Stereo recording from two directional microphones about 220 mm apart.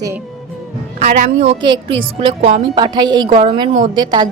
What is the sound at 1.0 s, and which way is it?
A woman's voice, 30° right (ahead or behind).